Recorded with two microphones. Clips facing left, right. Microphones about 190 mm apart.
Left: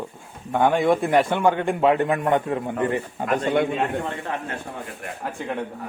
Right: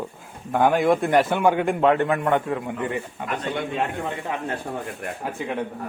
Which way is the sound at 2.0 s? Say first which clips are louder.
Even; 20° left (ahead or behind).